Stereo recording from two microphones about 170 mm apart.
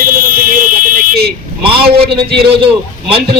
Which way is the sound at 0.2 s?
60° right (ahead or behind).